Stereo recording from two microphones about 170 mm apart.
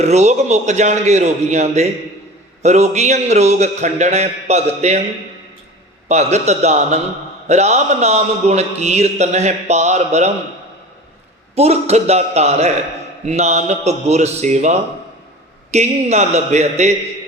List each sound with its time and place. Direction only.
0.0 s a man's voice: 40° right (ahead or behind)
6.1 s a man's voice: 40° right (ahead or behind)
11.5 s a man's voice: 40° right (ahead or behind)